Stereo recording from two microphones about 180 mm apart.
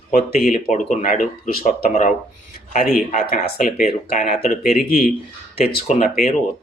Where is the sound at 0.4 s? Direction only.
45° left (ahead or behind).